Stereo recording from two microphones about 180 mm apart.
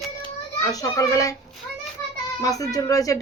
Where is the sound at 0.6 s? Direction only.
20° left (ahead or behind).